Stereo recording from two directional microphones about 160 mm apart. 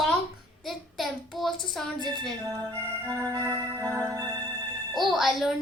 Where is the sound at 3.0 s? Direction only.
20° right (ahead or behind).